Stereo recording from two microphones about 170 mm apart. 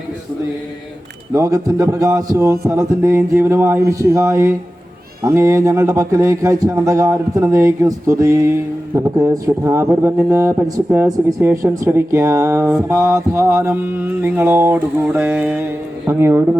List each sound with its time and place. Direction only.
1.3 s a man's voice: 20° right (ahead or behind)